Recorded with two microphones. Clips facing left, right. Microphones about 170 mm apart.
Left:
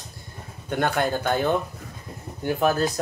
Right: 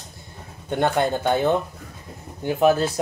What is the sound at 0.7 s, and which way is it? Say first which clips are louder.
Speech: right 3 dB; 25° right (ahead or behind).